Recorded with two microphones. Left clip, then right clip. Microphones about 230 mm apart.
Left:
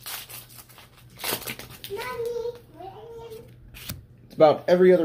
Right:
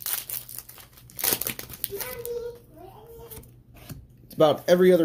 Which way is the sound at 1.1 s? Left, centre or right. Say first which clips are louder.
Even; right.